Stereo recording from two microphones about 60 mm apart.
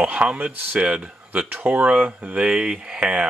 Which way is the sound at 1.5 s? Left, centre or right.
Right.